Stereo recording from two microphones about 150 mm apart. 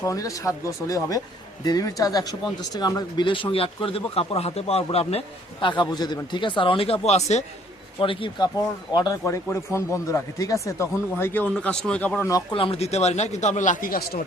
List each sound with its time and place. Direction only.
0.0 s speech: 20° left (ahead or behind); by 7.4 s 45° left (ahead or behind)
8.0 s speech: 35° left (ahead or behind); by 12.3 s 10° left (ahead or behind)
12.5 s speech: 40° left (ahead or behind); by 14.3 s 75° left (ahead or behind)